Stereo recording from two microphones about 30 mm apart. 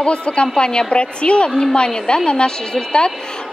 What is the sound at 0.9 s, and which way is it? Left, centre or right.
A woman's voice, left.